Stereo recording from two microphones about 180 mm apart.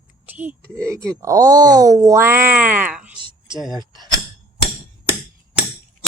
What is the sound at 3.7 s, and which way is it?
Speech, 25° right (ahead or behind).